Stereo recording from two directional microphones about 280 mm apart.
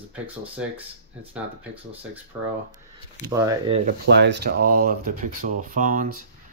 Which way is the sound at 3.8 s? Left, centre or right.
Right.